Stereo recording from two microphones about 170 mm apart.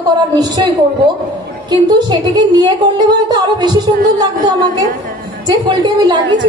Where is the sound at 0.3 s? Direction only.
25° right (ahead or behind).